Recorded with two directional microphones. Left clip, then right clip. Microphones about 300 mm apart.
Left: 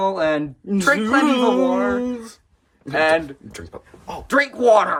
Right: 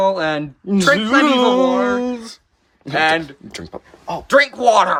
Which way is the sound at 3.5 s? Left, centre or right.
Right.